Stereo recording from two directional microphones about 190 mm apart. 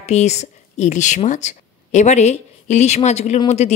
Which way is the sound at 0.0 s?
35° left (ahead or behind).